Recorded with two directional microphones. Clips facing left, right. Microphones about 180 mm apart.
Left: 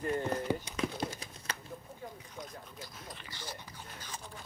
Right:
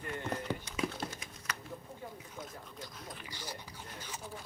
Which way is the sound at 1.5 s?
30° left (ahead or behind).